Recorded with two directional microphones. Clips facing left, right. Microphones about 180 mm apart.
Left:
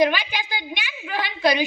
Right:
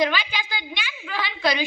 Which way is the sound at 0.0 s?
15° left (ahead or behind).